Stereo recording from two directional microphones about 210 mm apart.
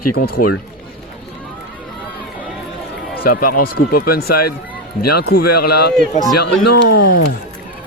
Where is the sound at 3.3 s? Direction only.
45° left (ahead or behind).